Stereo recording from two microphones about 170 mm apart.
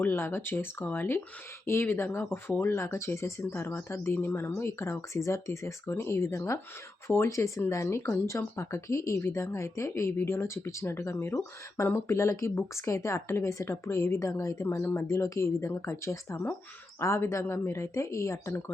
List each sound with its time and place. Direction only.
0.0 s speech: 15° left (ahead or behind)